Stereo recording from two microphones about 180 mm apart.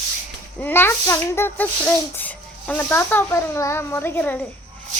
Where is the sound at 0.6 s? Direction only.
10° left (ahead or behind).